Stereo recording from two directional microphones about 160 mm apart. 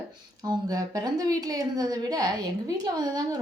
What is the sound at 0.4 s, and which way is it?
A woman's voice, 25° right (ahead or behind).